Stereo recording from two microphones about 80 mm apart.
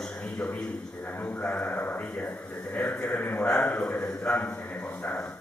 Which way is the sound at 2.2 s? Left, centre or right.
Centre.